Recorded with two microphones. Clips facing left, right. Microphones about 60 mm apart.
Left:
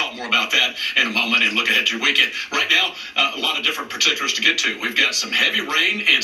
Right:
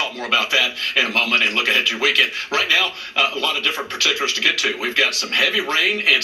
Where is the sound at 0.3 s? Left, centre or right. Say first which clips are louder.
Right 1 dB; centre.